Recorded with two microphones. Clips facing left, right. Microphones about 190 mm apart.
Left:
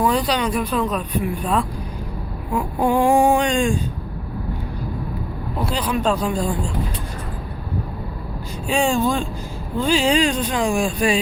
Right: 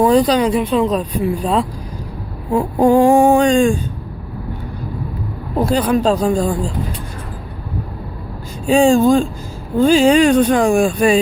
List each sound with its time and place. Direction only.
0.0 s speech: 35° right (ahead or behind)
2.7 s speech: 45° right (ahead or behind)
5.5 s speech: 45° right (ahead or behind)
6.0 s speech: 40° right (ahead or behind)
8.6 s speech: 40° right (ahead or behind)